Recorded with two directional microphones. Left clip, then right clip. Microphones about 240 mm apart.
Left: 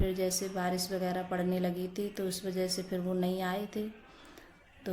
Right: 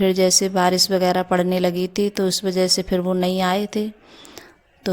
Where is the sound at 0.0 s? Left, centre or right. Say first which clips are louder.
Right 16 dB; right.